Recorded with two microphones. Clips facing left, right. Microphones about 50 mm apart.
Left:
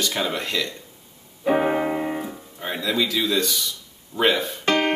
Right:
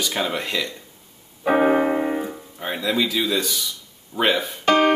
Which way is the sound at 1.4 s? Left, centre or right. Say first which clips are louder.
Right 3 dB; centre.